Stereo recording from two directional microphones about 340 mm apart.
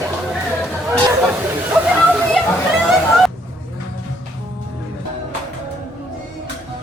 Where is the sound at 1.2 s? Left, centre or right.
Centre.